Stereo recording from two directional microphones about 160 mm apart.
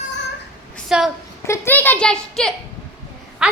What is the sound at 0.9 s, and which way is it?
Speech, 5° right (ahead or behind).